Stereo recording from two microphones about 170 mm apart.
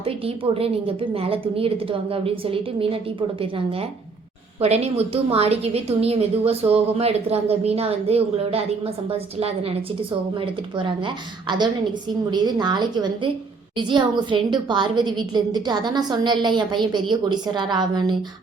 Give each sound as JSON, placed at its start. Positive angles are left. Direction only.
{"t": 0.0, "sound": "a woman's voice", "side_deg": -35}